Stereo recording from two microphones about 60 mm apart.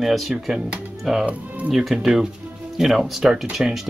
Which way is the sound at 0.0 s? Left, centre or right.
Centre.